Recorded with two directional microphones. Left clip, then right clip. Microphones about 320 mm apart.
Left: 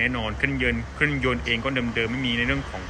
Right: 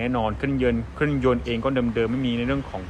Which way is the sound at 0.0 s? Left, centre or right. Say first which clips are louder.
Even; centre.